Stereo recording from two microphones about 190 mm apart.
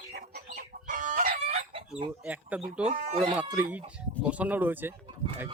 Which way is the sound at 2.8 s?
40° right (ahead or behind).